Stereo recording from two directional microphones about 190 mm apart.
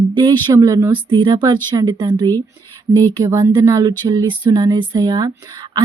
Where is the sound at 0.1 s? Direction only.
25° right (ahead or behind).